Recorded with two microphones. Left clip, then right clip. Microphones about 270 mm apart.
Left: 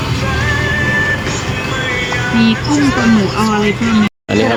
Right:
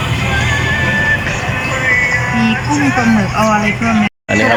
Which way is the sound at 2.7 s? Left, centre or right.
Centre.